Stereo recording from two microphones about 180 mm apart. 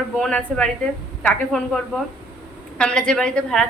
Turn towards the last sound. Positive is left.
turn(degrees=5)  # may be behind; listen again after turning